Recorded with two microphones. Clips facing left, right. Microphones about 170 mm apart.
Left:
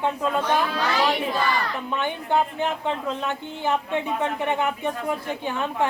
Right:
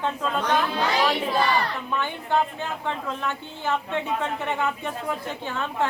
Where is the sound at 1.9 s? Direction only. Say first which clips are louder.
Left 2 dB; 20° left (ahead or behind).